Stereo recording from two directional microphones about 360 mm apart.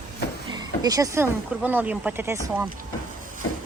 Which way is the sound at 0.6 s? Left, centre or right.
Centre.